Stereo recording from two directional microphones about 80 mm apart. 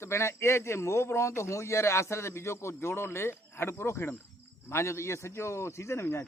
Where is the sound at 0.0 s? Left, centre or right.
Left.